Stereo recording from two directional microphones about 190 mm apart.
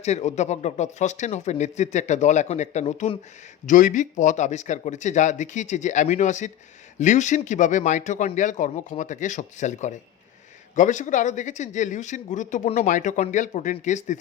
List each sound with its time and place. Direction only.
0.0 s speech: 35° left (ahead or behind)